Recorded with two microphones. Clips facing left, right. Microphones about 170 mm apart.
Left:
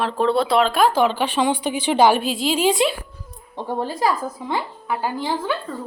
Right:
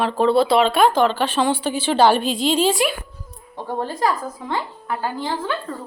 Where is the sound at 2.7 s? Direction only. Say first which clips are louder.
Left 1 dB; 20° left (ahead or behind).